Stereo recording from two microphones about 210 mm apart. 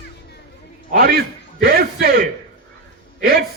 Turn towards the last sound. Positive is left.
turn(degrees=-45)  # may be behind; listen again after turning